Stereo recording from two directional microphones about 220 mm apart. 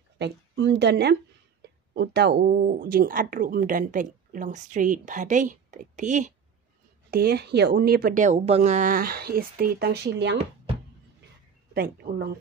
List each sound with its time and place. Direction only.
0.2 s a woman's voice: 50° right (ahead or behind); by 6.3 s 35° right (ahead or behind)
7.1 s a woman's voice: 45° right (ahead or behind)
11.7 s a woman's voice: 45° right (ahead or behind)